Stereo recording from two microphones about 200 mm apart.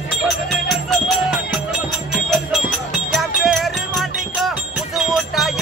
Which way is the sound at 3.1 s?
Centre (ahead or behind).